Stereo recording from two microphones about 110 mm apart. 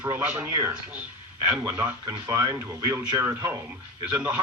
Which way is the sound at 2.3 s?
30° right (ahead or behind).